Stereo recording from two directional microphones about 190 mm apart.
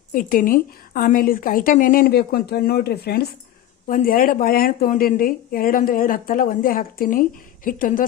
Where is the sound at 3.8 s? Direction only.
45° left (ahead or behind).